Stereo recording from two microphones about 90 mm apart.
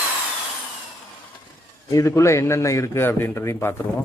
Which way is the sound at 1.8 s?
35° left (ahead or behind).